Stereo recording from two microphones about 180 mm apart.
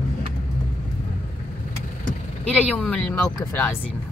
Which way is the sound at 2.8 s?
5° left (ahead or behind).